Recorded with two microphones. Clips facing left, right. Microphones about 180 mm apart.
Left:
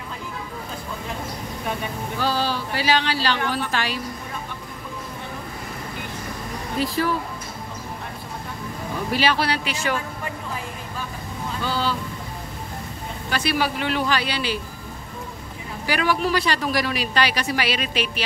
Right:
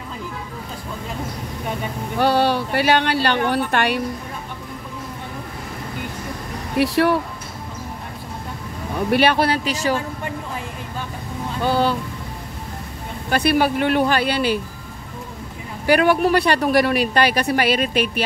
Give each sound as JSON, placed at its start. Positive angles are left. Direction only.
{"t": 2.1, "sound": "a woman's voice", "side_deg": -60}
{"t": 6.8, "sound": "speech", "side_deg": -70}
{"t": 9.1, "sound": "speech", "side_deg": -55}
{"t": 11.6, "sound": "a woman's voice", "side_deg": -55}
{"t": 13.3, "sound": "speech", "side_deg": -55}
{"t": 15.9, "sound": "a woman's voice", "side_deg": -55}